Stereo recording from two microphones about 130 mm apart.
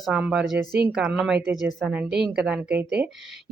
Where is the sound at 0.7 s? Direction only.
15° right (ahead or behind).